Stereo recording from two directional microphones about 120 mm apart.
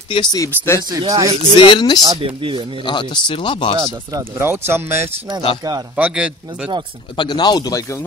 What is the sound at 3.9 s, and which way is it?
Speech, 35° right (ahead or behind).